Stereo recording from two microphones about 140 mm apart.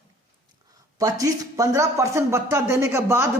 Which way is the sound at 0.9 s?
25° right (ahead or behind).